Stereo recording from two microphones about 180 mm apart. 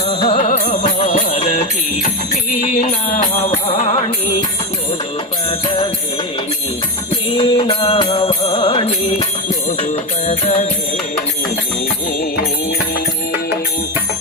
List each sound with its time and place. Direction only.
0.1 s music: 30° left (ahead or behind)
5.5 s music: 25° left (ahead or behind)
7.3 s music: 30° left (ahead or behind)
9.6 s music: 40° left (ahead or behind)